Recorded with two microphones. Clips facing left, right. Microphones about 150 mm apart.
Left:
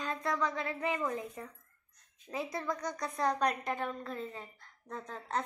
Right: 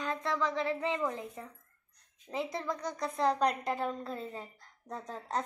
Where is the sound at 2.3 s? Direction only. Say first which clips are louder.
Right 1 dB; 25° right (ahead or behind).